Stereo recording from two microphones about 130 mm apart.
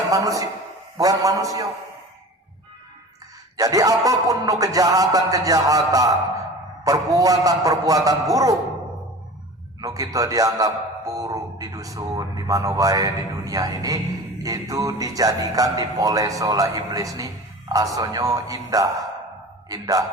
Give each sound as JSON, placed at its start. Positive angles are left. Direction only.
{"t": 0.1, "sound": "speech", "side_deg": -25}
{"t": 3.6, "sound": "speech", "side_deg": -25}
{"t": 9.8, "sound": "a man's voice", "side_deg": -25}